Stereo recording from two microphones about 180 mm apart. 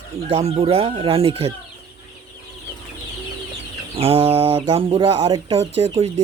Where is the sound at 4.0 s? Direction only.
35° right (ahead or behind).